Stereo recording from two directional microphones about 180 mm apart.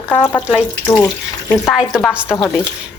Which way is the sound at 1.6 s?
5° right (ahead or behind).